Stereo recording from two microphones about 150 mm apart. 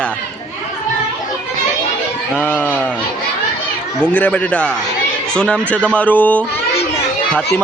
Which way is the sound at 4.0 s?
10° left (ahead or behind).